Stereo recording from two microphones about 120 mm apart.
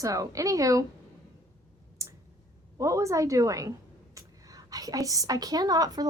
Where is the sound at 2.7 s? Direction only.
25° right (ahead or behind).